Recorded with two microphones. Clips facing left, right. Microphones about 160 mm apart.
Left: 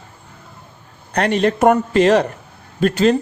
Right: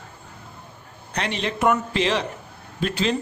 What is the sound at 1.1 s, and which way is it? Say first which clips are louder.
Speech: left 10 dB; 50° left (ahead or behind).